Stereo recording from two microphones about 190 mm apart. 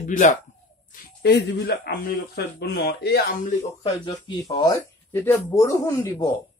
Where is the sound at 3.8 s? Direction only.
25° left (ahead or behind).